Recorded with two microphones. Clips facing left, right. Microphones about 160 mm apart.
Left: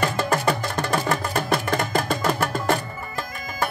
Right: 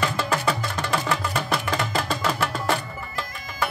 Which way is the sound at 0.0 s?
45° left (ahead or behind).